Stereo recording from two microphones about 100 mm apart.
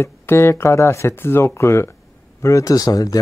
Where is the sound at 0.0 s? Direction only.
25° left (ahead or behind).